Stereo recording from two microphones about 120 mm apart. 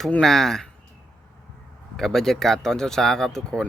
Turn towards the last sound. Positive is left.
turn(degrees=5)  # may be behind; listen again after turning